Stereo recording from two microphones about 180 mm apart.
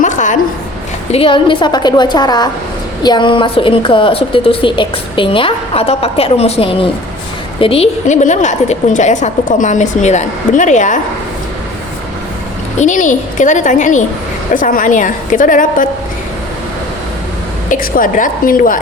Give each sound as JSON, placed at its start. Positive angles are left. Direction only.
{"t": 0.0, "sound": "a sound", "side_deg": 45}
{"t": 1.1, "sound": "a woman's voice", "side_deg": 30}
{"t": 12.8, "sound": "a woman's voice", "side_deg": 45}
{"t": 17.7, "sound": "a woman's voice", "side_deg": 50}